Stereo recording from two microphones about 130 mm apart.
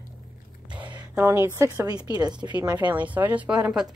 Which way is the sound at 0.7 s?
35° right (ahead or behind).